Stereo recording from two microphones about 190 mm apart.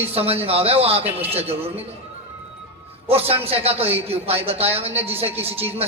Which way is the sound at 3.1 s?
30° right (ahead or behind).